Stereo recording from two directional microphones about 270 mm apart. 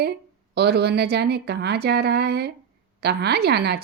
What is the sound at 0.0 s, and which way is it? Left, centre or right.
Speech, right.